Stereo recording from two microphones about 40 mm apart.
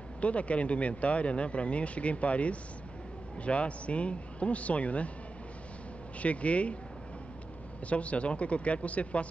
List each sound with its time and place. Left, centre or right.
0.2 s speech: left
6.1 s speech: left
7.9 s speech: left